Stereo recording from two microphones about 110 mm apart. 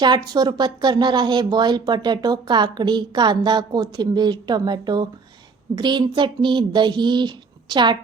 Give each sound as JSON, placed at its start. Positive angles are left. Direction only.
{"t": 0.0, "sound": "speech", "side_deg": -40}